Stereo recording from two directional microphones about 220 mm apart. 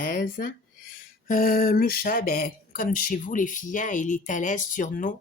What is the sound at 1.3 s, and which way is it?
Speech, 40° left (ahead or behind).